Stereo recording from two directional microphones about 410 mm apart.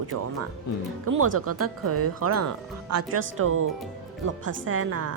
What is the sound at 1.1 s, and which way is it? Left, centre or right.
Speech, right.